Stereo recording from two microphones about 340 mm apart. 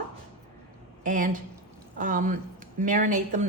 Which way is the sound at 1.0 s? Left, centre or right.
Right.